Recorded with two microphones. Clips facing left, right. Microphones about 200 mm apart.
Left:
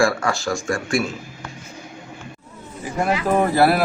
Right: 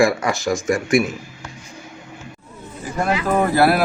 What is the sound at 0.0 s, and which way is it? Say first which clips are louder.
Speech: right 2 dB; 20° right (ahead or behind).